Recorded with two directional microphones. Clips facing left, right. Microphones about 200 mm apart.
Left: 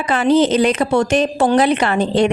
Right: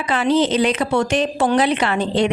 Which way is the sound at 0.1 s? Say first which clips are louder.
Left 3 dB; 45° left (ahead or behind).